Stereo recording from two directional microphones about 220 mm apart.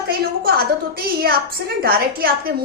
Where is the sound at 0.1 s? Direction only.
45° right (ahead or behind).